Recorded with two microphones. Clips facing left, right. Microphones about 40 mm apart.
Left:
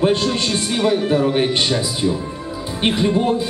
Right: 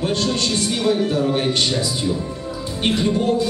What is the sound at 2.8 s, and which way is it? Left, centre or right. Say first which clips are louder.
Speech: left 2 dB; centre.